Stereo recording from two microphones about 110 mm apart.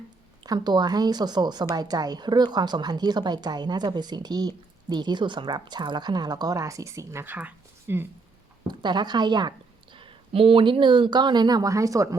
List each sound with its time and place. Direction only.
0.4 s speech: 40° right (ahead or behind); by 8.0 s 15° right (ahead or behind)
8.6 s speech: 40° right (ahead or behind)
9.9 s speech: 50° right (ahead or behind); by 12.0 s 30° right (ahead or behind)